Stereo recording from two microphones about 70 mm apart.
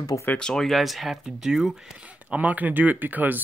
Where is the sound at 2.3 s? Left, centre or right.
Right.